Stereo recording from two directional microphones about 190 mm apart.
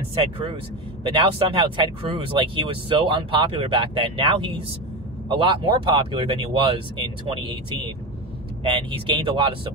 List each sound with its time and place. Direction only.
0.1 s speech: 30° right (ahead or behind)
8.6 s speech: 25° right (ahead or behind)